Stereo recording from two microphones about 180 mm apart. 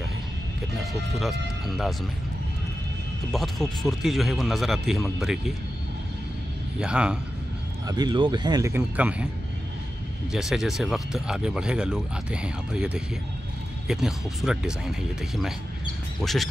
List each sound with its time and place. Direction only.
1.1 s speech: centre (ahead or behind)
3.3 s speech: centre (ahead or behind)
6.8 s speech: 5° right (ahead or behind)
7.8 s speech: 20° right (ahead or behind)
10.3 s speech: 5° right (ahead or behind)